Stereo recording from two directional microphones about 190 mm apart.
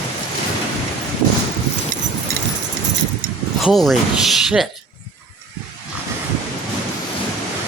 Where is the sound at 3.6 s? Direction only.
Centre (ahead or behind).